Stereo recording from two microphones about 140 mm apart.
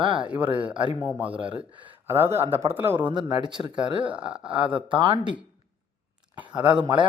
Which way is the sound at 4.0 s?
10° right (ahead or behind).